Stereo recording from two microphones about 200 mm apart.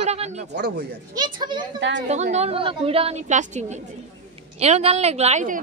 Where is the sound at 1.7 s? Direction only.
65° right (ahead or behind).